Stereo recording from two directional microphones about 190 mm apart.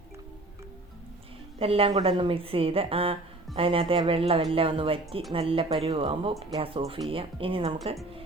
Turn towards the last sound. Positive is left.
turn(degrees=-30)  # may be behind; listen again after turning